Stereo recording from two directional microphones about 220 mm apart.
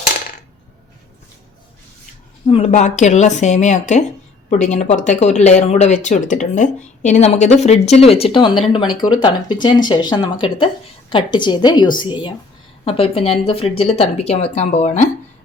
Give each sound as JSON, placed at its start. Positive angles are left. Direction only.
{"t": 2.5, "sound": "speech", "side_deg": 30}